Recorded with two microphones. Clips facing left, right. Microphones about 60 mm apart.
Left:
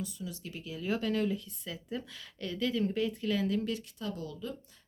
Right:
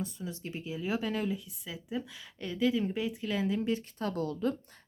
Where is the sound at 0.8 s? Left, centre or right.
Centre.